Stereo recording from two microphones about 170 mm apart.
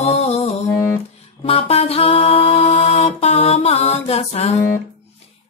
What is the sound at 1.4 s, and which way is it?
Music, 35° left (ahead or behind).